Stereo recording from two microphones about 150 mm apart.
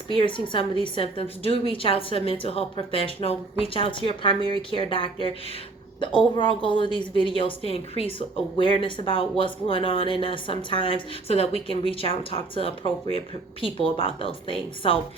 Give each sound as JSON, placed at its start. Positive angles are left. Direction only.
{"t": 0.1, "sound": "a woman's voice", "side_deg": 35}